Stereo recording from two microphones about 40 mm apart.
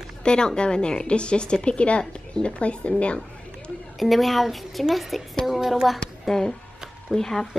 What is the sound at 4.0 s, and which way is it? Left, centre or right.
A woman's voice, centre.